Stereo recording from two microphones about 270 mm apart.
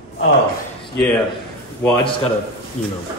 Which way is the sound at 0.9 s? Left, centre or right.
Centre.